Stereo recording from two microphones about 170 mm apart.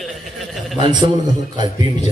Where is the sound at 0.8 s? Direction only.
25° right (ahead or behind).